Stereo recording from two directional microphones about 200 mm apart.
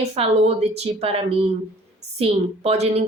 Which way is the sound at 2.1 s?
30° right (ahead or behind).